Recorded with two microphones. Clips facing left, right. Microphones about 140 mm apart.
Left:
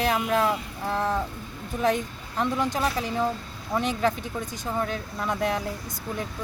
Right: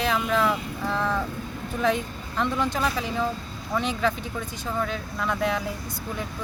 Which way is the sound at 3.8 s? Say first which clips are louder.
Left 1 dB; 45° left (ahead or behind).